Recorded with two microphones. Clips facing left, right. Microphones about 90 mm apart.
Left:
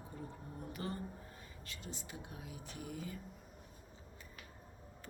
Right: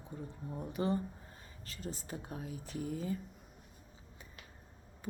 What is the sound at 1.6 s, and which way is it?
Speech, 40° right (ahead or behind).